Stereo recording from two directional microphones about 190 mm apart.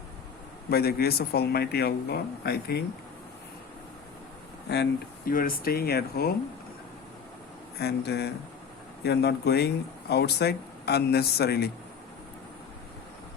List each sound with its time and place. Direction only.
0.7 s speech: 55° left (ahead or behind)
4.7 s speech: 55° left (ahead or behind)
7.8 s speech: 60° left (ahead or behind)